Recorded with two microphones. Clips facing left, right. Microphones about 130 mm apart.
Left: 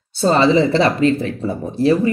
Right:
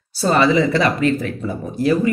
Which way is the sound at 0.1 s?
25° left (ahead or behind).